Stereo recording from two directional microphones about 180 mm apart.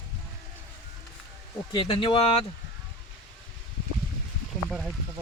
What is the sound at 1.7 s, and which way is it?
Speech, 30° left (ahead or behind).